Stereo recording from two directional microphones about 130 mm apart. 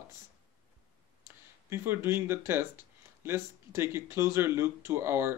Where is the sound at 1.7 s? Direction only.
15° right (ahead or behind).